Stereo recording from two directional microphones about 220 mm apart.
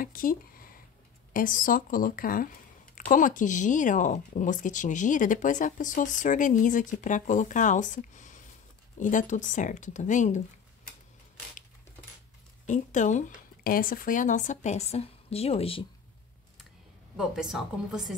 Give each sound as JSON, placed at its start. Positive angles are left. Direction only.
{"t": 0.0, "sound": "a sound", "side_deg": 40}
{"t": 1.3, "sound": "speech", "side_deg": 40}
{"t": 12.6, "sound": "speech", "side_deg": 35}
{"t": 17.2, "sound": "a woman's voice", "side_deg": 0}